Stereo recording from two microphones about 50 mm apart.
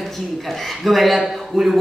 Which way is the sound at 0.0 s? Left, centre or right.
Centre.